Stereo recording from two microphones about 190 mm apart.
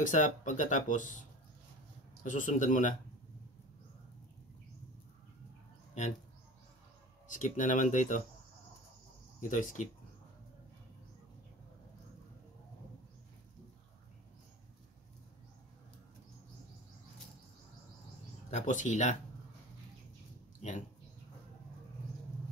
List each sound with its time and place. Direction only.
0.0 s speech: 40° left (ahead or behind)
2.2 s speech: 45° left (ahead or behind)
6.0 s speech: 40° left (ahead or behind)
7.2 s speech: 40° left (ahead or behind)
9.4 s speech: 40° left (ahead or behind)
18.5 s speech: 40° left (ahead or behind)
20.6 s speech: 40° left (ahead or behind)